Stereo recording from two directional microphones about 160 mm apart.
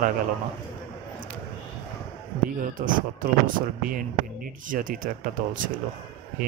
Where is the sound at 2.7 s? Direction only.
60° right (ahead or behind).